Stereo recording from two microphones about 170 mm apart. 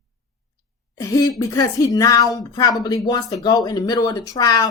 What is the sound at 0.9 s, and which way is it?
Speech, 20° left (ahead or behind).